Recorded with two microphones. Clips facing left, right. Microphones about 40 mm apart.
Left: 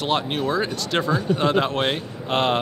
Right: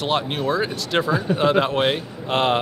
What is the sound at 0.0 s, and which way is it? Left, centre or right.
Speech, centre.